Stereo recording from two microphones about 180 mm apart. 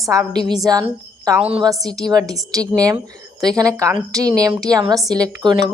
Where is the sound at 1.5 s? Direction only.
30° right (ahead or behind).